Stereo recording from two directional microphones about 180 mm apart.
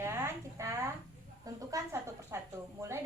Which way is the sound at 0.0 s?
15° right (ahead or behind).